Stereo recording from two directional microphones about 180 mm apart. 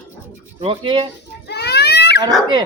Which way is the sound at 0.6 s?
30° right (ahead or behind).